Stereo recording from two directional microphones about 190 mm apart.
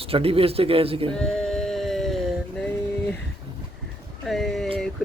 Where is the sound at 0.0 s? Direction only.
30° right (ahead or behind).